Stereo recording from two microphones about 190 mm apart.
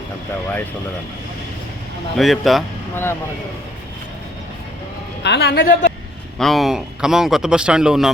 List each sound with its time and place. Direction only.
2.1 s speech: centre (ahead or behind)
2.9 s speech: 10° left (ahead or behind)
5.2 s a man's voice: 65° left (ahead or behind)
6.4 s speech: centre (ahead or behind)